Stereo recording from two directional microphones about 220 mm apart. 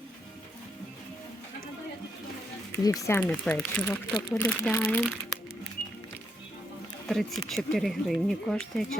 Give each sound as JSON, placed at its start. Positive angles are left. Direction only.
{"t": 2.8, "sound": "speech", "side_deg": 15}
{"t": 7.1, "sound": "speech", "side_deg": 0}